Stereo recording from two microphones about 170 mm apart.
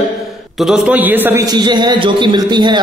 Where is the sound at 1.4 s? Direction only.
25° right (ahead or behind).